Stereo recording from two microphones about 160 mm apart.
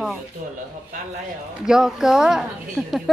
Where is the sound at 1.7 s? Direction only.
5° right (ahead or behind).